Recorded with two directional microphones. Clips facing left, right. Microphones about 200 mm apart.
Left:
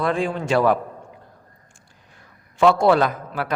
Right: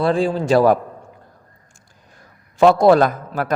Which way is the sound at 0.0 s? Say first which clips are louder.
Right 5 dB; 30° right (ahead or behind).